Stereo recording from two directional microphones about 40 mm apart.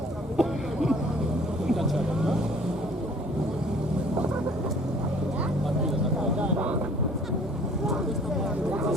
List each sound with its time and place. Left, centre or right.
0.3 s a sound: centre
1.6 s vehicle: centre
6.4 s vehicle: right